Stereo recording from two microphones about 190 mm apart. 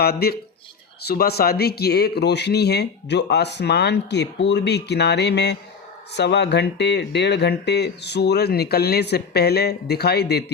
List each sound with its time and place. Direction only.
0.0 s speech: 55° left (ahead or behind)